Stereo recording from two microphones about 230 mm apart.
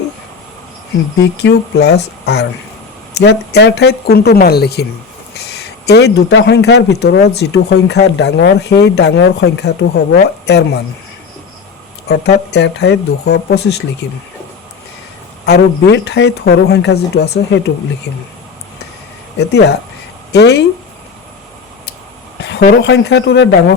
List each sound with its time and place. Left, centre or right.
1.4 s a man's voice: left
12.0 s speech: left
15.4 s speech: left
19.4 s speech: left
22.6 s speech: left